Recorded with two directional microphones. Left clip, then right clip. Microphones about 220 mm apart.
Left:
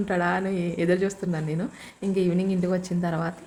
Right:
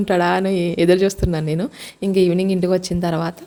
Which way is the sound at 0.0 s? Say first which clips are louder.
Right 8 dB; 45° right (ahead or behind).